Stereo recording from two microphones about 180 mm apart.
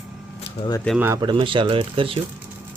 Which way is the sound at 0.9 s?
10° right (ahead or behind).